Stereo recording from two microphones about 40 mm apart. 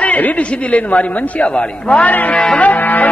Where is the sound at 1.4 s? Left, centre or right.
Left.